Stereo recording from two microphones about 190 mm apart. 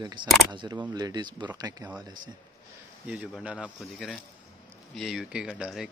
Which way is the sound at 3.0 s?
Centre (ahead or behind).